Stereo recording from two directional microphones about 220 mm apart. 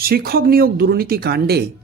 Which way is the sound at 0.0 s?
45° right (ahead or behind).